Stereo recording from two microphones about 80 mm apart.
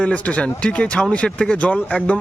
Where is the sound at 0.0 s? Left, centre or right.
Centre.